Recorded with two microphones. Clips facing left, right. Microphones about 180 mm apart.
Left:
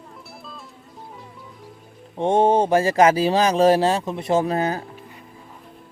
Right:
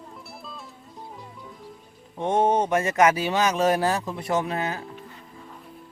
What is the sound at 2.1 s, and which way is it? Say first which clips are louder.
Speech: left 4 dB; 30° left (ahead or behind).